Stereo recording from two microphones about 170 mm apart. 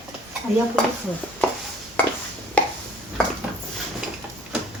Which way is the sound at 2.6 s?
10° left (ahead or behind).